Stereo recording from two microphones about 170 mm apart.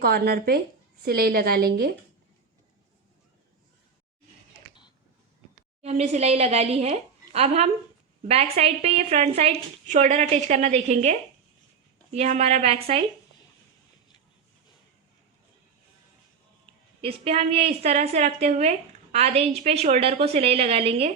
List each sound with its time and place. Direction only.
0.0 s a woman's voice: 65° right (ahead or behind)
5.8 s a woman's voice: 40° right (ahead or behind)
17.0 s a woman's voice: 35° right (ahead or behind)